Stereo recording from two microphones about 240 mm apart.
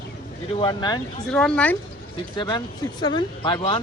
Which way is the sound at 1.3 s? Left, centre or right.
Centre.